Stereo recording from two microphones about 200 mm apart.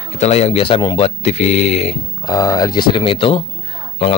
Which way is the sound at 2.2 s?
20° left (ahead or behind).